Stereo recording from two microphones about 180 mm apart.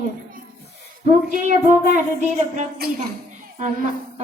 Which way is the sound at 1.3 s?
45° right (ahead or behind).